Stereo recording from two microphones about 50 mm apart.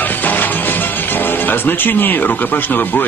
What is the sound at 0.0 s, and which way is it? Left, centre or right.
Speech, left.